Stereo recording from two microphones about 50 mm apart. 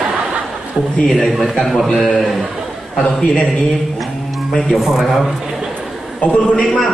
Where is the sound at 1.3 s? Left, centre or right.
Centre.